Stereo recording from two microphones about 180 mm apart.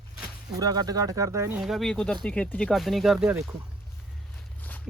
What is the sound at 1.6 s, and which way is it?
Speech, centre (ahead or behind).